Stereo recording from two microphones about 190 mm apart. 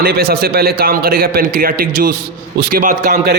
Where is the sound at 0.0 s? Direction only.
55° right (ahead or behind).